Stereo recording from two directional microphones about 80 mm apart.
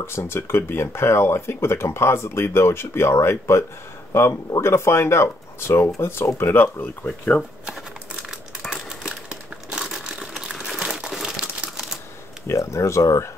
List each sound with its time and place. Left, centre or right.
0.0 s speech: left
8.3 s crumpling: centre
11.4 s crumpling: centre
12.4 s speech: left